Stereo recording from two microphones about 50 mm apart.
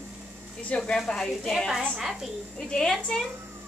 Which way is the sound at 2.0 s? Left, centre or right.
Centre.